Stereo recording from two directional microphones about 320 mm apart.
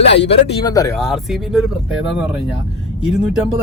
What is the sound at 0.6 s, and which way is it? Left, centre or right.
Speech, centre.